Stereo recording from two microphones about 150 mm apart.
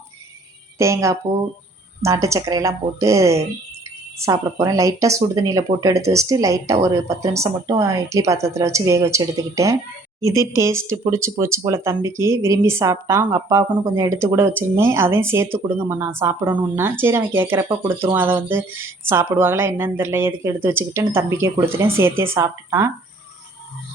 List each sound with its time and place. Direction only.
0.8 s a woman's voice: 20° right (ahead or behind)